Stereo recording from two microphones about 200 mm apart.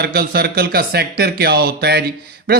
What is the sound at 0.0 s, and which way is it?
Speech, 50° right (ahead or behind).